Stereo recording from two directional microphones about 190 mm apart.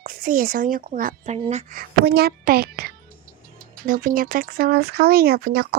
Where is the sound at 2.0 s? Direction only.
55° right (ahead or behind).